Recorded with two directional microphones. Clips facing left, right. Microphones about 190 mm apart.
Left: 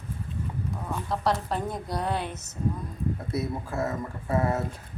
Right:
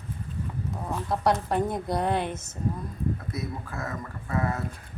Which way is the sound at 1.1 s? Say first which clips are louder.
Right 2 dB; 15° right (ahead or behind).